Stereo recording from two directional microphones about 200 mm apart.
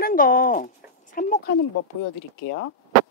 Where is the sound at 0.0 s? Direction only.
45° left (ahead or behind).